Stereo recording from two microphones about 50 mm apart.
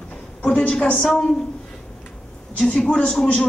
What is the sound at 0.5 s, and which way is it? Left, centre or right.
Speech, centre.